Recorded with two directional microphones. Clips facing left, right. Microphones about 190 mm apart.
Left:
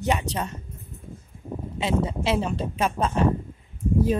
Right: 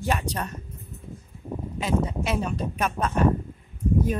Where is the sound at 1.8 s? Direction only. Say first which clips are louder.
Left 1 dB; 25° left (ahead or behind).